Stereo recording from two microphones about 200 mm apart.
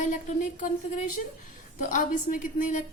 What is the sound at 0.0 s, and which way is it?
A woman's voice, 40° left (ahead or behind).